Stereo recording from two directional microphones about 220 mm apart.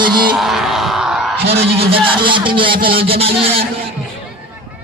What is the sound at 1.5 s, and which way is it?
Speech, 25° right (ahead or behind).